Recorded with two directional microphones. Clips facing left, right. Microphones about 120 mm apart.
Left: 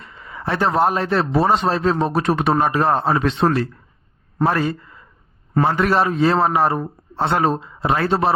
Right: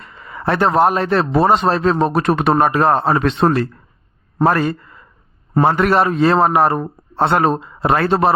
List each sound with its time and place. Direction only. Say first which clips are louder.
0.0 s a man's voice: right 6 dB; 55° right (ahead or behind)